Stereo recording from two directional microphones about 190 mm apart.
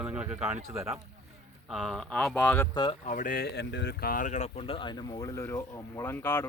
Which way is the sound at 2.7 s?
25° left (ahead or behind).